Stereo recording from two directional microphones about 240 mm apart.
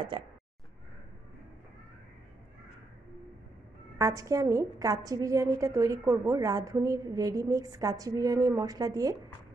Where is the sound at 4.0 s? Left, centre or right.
Centre.